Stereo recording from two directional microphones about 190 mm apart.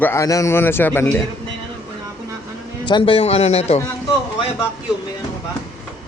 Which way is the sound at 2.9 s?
25° left (ahead or behind).